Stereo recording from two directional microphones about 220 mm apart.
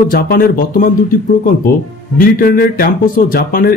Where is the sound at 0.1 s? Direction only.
40° left (ahead or behind).